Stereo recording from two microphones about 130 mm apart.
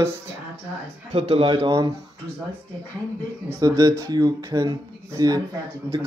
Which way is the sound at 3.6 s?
30° right (ahead or behind).